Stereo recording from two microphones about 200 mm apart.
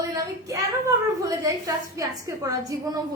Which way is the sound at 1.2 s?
15° right (ahead or behind).